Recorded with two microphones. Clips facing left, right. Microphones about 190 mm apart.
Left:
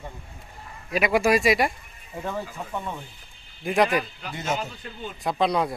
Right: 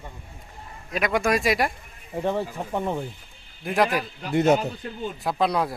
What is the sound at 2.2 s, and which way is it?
Speech, 35° right (ahead or behind).